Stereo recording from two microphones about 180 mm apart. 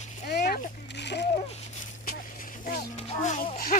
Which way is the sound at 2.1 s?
50° left (ahead or behind).